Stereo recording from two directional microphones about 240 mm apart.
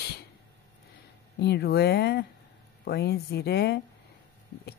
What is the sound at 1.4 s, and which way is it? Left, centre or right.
A woman's voice, left.